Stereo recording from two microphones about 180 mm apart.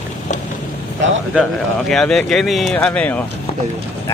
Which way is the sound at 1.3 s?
Centre (ahead or behind).